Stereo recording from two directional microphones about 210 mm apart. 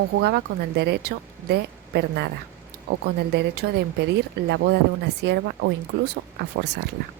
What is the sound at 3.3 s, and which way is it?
A woman's voice, 50° right (ahead or behind).